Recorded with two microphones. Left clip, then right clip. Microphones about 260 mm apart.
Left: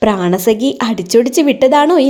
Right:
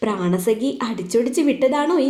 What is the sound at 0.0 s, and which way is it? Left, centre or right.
A woman's voice, left.